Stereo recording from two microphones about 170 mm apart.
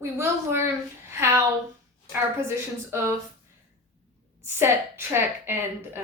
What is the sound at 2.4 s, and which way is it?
Speech, 15° right (ahead or behind).